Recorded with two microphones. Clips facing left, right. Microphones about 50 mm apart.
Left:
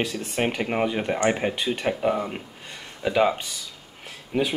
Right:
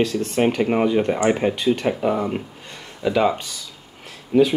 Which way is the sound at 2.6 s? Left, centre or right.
Centre.